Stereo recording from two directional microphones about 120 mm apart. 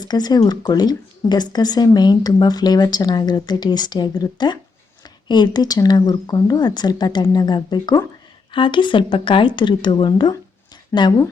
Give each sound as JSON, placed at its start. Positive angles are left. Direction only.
{"t": 0.0, "sound": "speech", "side_deg": 35}